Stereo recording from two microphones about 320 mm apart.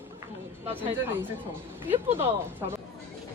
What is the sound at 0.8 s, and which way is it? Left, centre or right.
Speech, centre.